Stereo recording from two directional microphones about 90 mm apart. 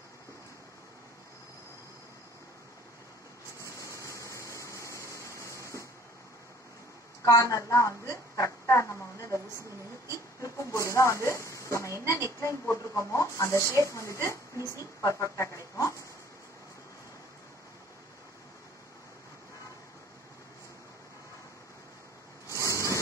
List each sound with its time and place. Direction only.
3.6 s vehicle: 35° left (ahead or behind)
7.2 s a woman's voice: 40° left (ahead or behind)
22.5 s a sound: 35° left (ahead or behind)